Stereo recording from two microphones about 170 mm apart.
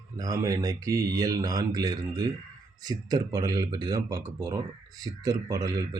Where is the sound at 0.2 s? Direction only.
20° right (ahead or behind).